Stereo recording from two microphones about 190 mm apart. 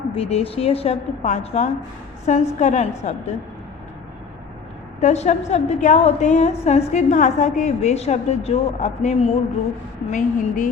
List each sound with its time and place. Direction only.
0.1 s a woman's voice: 30° left (ahead or behind)
4.9 s a woman's voice: 35° left (ahead or behind)